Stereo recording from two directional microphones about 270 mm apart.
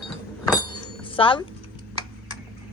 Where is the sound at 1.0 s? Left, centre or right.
Centre.